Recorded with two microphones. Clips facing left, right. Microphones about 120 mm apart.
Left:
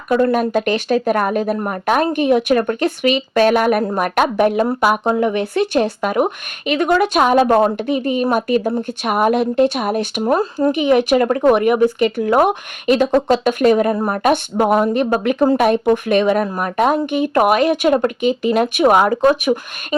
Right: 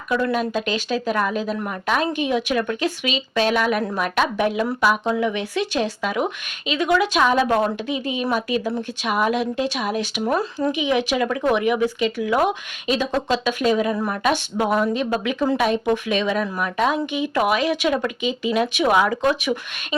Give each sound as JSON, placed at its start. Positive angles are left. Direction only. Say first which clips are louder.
{"t": 0.1, "sound": "speech", "louder": "left 6 dB", "side_deg": 50}